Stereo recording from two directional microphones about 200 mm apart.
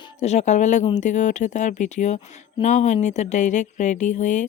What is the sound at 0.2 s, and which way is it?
Speech, 35° left (ahead or behind).